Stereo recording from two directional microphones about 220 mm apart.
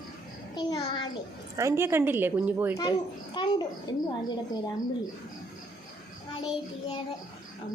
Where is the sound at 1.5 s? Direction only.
10° right (ahead or behind).